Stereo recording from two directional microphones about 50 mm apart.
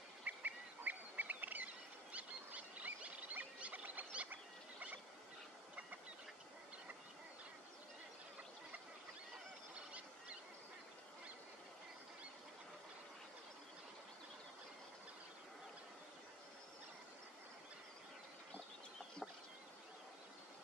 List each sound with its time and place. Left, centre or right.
0.2 s duck: right
2.1 s a sound: right
9.8 s goose: right